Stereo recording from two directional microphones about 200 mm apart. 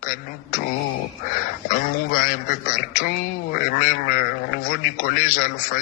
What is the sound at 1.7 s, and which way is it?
Speech, 45° left (ahead or behind).